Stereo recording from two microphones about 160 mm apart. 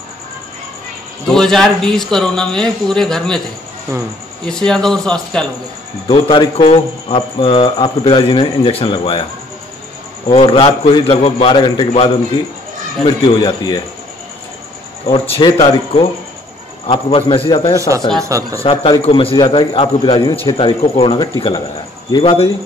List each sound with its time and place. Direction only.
1.3 s speech: centre (ahead or behind)
4.5 s speech: 5° left (ahead or behind)
6.0 s speech: 30° left (ahead or behind)
10.3 s speech: 35° left (ahead or behind)
13.0 s speech: 25° left (ahead or behind)
15.3 s speech: 30° left (ahead or behind)
17.7 s speech: 20° right (ahead or behind)
18.6 s speech: 35° left (ahead or behind)